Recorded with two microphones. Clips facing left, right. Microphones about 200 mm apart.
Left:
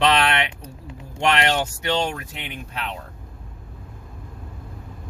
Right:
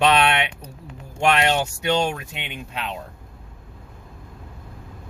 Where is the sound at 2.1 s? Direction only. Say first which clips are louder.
Even; 25° right (ahead or behind).